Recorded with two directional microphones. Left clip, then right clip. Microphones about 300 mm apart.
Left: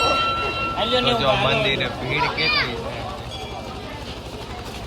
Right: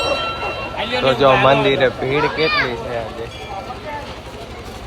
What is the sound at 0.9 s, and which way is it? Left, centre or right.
Speech, centre.